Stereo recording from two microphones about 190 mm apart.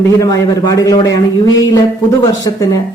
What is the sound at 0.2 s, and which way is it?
Speech, 20° left (ahead or behind).